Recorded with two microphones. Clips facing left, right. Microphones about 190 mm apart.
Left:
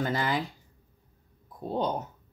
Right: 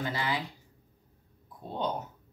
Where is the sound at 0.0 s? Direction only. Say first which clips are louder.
Left 4 dB; 50° left (ahead or behind).